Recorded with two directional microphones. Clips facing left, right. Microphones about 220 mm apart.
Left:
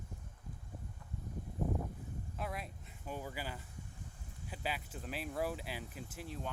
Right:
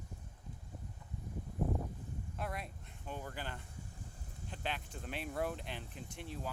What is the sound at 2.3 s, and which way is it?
Speech, centre (ahead or behind).